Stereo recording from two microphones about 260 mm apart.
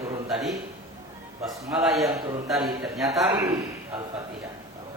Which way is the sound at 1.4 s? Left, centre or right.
Centre.